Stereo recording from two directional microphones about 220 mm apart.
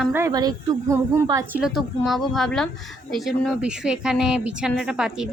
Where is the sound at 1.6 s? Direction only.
Centre (ahead or behind).